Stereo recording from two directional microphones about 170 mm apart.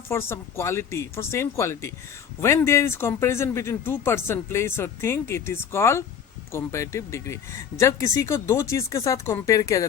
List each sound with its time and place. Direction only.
0.1 s speech: 15° left (ahead or behind)